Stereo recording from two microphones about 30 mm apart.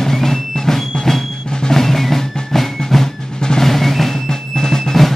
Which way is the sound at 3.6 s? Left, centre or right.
Centre.